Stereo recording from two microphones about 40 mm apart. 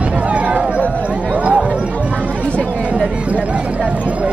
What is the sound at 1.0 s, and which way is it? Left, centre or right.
Chatter, right.